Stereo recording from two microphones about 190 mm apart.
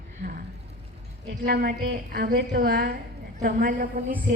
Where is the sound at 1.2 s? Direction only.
55° right (ahead or behind).